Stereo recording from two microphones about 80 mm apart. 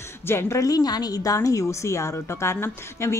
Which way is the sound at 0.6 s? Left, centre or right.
Left.